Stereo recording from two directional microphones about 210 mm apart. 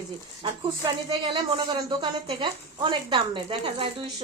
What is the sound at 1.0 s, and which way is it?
A woman's voice, 25° right (ahead or behind).